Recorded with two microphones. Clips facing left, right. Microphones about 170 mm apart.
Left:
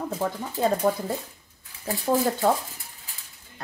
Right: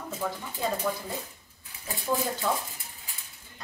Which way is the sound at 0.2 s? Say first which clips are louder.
Left 6 dB; 50° left (ahead or behind).